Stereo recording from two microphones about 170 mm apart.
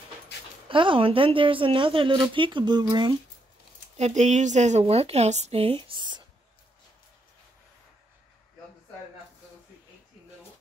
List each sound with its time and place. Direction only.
0.7 s a woman's voice: 30° right (ahead or behind)
3.9 s a woman's voice: 45° right (ahead or behind); by 6.2 s 25° right (ahead or behind)